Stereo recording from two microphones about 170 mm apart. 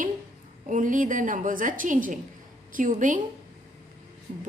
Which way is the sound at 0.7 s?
50° right (ahead or behind).